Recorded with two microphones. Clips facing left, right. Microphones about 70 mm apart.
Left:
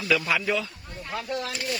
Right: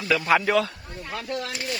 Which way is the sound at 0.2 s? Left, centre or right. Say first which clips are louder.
Right 6 dB; right.